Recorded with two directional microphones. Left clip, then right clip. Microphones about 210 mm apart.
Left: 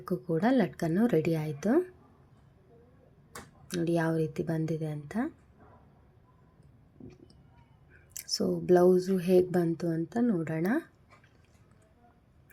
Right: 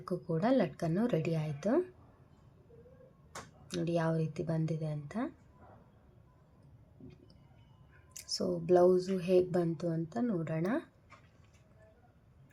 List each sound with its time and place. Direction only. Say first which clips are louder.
0.0 s speech: left 4 dB; 15° left (ahead or behind)
3.7 s speech: left 4 dB; 15° left (ahead or behind)
8.1 s speech: left 4 dB; 15° left (ahead or behind)